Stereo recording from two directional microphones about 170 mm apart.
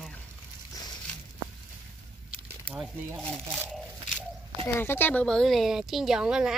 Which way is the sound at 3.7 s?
5° left (ahead or behind).